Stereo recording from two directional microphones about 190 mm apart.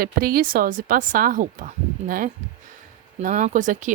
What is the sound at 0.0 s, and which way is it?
A woman's voice, 50° right (ahead or behind).